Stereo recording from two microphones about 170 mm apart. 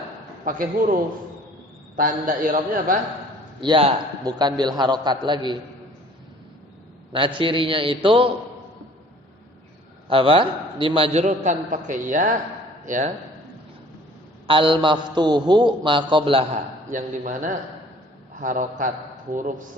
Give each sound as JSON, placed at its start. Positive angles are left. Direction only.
{"t": 0.4, "sound": "a man's voice", "side_deg": -55}
{"t": 2.0, "sound": "a man's voice", "side_deg": -50}
{"t": 3.6, "sound": "a man's voice", "side_deg": -30}
{"t": 7.3, "sound": "a man's voice", "side_deg": -30}
{"t": 10.1, "sound": "a man's voice", "side_deg": -30}
{"t": 14.4, "sound": "a man's voice", "side_deg": -30}
{"t": 16.9, "sound": "a man's voice", "side_deg": -50}